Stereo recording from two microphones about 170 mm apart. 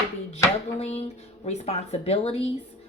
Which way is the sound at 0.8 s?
40° left (ahead or behind).